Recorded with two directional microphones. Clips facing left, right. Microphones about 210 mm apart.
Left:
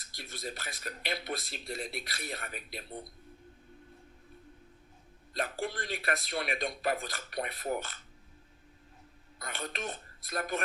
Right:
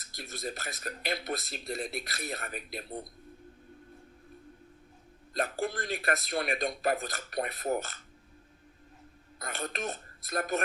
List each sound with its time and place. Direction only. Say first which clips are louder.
0.1 s speech: right 3 dB; 45° right (ahead or behind)
5.3 s speech: right 3 dB; 45° right (ahead or behind)
9.4 s speech: right 3 dB; 45° right (ahead or behind)